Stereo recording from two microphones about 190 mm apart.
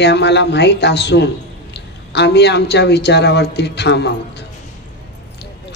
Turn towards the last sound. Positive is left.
turn(degrees=65)  # may be behind; listen again after turning